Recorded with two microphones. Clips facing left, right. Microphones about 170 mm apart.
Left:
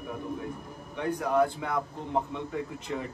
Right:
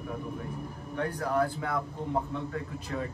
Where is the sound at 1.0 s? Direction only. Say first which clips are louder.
Left 3 dB; 15° left (ahead or behind).